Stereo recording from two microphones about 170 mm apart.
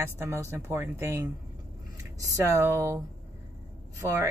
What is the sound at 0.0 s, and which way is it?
Speech, 15° right (ahead or behind).